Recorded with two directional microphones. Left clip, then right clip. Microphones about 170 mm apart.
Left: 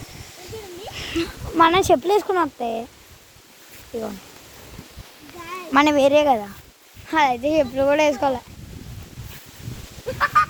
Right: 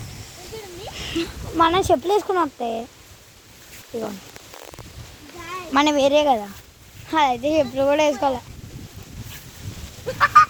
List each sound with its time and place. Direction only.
0.9 s a sound: 5° left (ahead or behind)
1.5 s speech: 20° left (ahead or behind)
5.7 s speech: 20° left (ahead or behind)
10.1 s goose: centre (ahead or behind)